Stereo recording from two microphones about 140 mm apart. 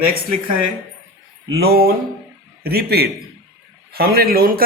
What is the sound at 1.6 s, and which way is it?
A man's voice, 90° right.